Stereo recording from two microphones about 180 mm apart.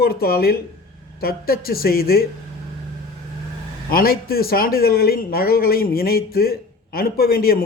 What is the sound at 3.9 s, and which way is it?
Speech, 55° left (ahead or behind).